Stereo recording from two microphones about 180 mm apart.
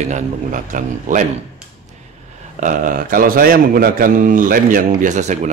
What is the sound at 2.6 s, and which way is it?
A man's voice, 45° right (ahead or behind).